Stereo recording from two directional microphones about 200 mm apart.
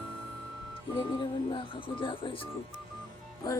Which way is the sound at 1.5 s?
25° left (ahead or behind).